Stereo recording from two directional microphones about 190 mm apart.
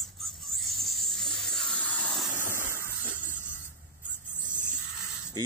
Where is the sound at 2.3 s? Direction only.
10° right (ahead or behind).